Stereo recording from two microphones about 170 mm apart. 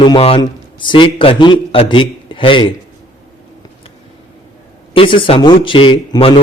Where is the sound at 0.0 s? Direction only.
30° left (ahead or behind).